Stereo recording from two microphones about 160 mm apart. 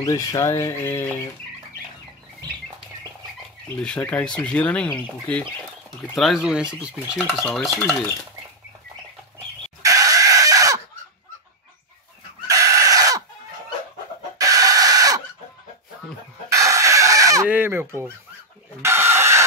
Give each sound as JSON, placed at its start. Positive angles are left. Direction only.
{"t": 0.0, "sound": "speech", "side_deg": 20}
{"t": 3.8, "sound": "speech", "side_deg": 5}
{"t": 6.1, "sound": "speech", "side_deg": 0}
{"t": 9.8, "sound": "chicken", "side_deg": -20}
{"t": 12.4, "sound": "crow", "side_deg": -20}
{"t": 14.4, "sound": "chicken", "side_deg": -20}
{"t": 16.4, "sound": "chicken", "side_deg": -20}
{"t": 17.5, "sound": "fowl", "side_deg": -15}
{"t": 18.8, "sound": "chicken", "side_deg": -15}